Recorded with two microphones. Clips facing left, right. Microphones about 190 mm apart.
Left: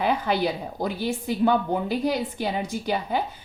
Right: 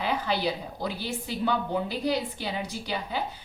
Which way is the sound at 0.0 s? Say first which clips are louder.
Left 4 dB; 50° left (ahead or behind).